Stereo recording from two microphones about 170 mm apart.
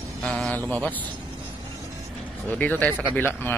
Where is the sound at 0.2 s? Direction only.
5° left (ahead or behind).